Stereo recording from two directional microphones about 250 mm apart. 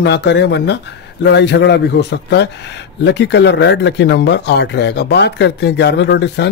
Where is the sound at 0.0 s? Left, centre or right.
Left.